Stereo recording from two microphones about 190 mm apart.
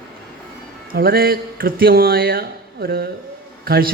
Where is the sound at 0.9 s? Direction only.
50° right (ahead or behind).